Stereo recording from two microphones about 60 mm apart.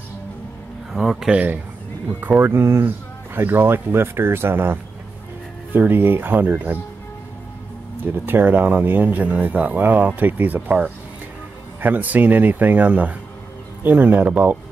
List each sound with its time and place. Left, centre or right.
0.9 s speech: centre
1.3 s speech: right
2.1 s speech: right
2.6 s speech: right
3.3 s speech: right
8.0 s speech: right